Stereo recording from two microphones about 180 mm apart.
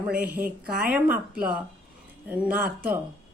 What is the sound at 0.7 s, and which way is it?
Speech, 55° right (ahead or behind).